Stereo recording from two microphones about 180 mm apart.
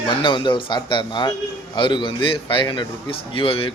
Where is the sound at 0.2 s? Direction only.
25° left (ahead or behind).